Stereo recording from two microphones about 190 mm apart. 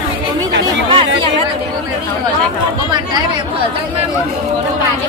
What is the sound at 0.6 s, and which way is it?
Chatter, 30° right (ahead or behind).